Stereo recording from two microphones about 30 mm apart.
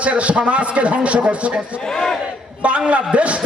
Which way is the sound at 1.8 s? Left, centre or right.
Centre.